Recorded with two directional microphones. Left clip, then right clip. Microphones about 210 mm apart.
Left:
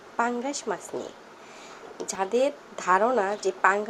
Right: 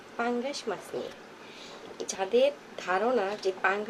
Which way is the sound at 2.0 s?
20° left (ahead or behind).